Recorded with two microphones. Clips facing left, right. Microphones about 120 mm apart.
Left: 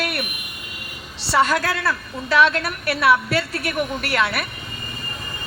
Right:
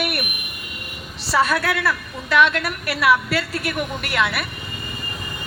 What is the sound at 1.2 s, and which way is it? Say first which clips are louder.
A woman's voice: left 1 dB; 30° left (ahead or behind).